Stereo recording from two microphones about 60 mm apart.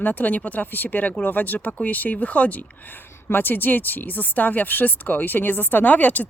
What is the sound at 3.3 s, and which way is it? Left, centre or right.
Speech, left.